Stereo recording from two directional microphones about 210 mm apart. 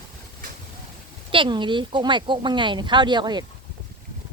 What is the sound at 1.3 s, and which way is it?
Speech, 25° right (ahead or behind).